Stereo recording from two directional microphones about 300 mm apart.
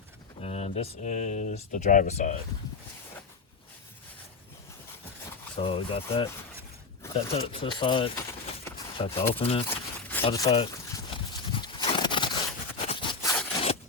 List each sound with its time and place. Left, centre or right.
0.4 s speech: left
5.5 s speech: centre
7.3 s speech: centre
9.6 s a sound: centre
10.2 s horse: centre